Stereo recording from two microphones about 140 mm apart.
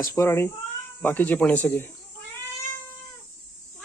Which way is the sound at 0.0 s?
20° left (ahead or behind).